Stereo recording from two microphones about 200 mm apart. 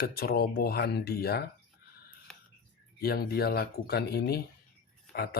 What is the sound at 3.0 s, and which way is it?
Speech, 50° left (ahead or behind).